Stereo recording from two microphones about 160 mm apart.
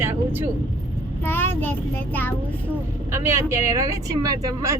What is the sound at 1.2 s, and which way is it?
Speech, 15° left (ahead or behind).